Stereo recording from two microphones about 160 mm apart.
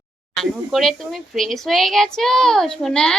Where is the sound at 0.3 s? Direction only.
Centre (ahead or behind).